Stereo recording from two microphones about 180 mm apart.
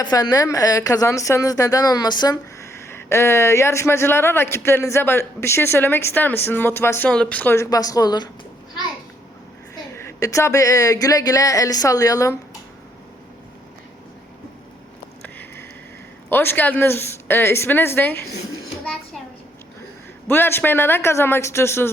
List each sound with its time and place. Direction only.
0.0 s speech: 20° left (ahead or behind)
9.7 s a woman's voice: 15° left (ahead or behind)
15.2 s a sound: 10° left (ahead or behind)
16.3 s speech: 10° left (ahead or behind)
20.2 s speech: 10° left (ahead or behind)